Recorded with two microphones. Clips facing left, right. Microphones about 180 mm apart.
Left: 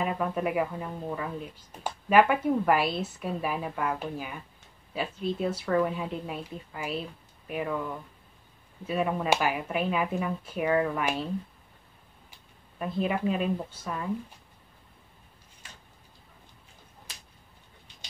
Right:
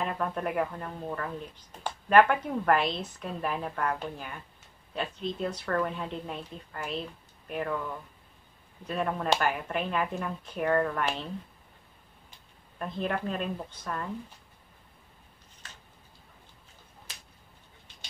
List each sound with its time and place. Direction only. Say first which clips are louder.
0.0 s a woman's voice: left 3 dB; 5° left (ahead or behind)
8.8 s a woman's voice: left 2 dB; 5° left (ahead or behind)
12.7 s a woman's voice: left 3 dB; 5° left (ahead or behind)
15.6 s a sound: even; 10° left (ahead or behind)